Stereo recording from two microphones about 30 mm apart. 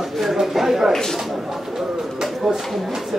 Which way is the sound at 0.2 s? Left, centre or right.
Centre.